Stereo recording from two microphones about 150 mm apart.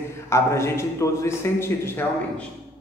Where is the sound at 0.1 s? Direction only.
20° left (ahead or behind).